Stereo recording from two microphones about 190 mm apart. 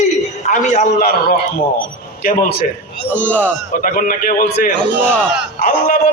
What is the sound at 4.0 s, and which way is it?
A man's voice, 45° left (ahead or behind).